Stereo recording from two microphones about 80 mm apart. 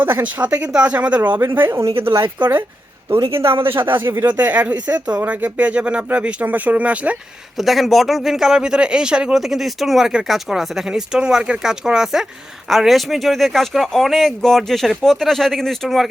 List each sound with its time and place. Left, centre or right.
0.0 s speech: right
1.4 s speech: right
3.7 s speech: right
3.9 s speech: right
4.3 s speech: centre
7.5 s speech: centre